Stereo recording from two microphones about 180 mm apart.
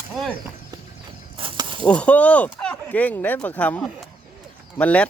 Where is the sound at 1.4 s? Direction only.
30° right (ahead or behind).